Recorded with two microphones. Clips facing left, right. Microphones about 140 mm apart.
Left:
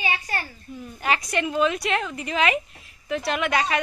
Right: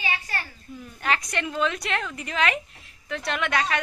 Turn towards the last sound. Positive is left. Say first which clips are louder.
# left 2 dB
turn(degrees=10)  # may be behind; listen again after turning